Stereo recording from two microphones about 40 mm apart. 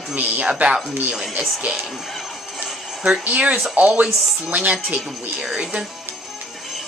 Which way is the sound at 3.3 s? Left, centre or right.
Right.